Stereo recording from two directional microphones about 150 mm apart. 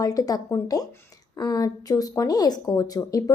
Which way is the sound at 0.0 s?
25° left (ahead or behind).